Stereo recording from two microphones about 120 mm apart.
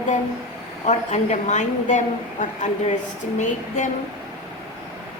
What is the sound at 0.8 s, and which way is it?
A woman's voice, 70° left (ahead or behind).